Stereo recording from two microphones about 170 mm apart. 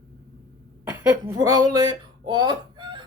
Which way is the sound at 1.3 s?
20° right (ahead or behind).